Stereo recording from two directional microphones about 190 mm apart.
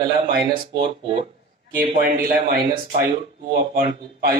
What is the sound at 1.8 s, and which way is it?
A man's voice, 50° right (ahead or behind).